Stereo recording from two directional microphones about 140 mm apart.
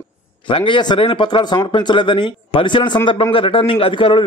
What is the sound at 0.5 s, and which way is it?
A man's voice, 35° left (ahead or behind).